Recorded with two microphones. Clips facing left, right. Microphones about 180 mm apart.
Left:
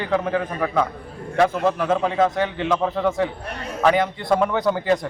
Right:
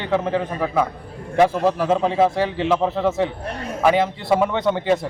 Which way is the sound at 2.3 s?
30° right (ahead or behind).